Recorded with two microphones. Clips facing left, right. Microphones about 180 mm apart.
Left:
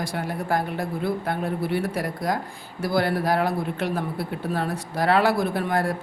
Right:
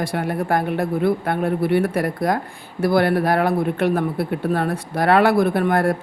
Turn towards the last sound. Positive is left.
turn(degrees=-55)  # may be behind; listen again after turning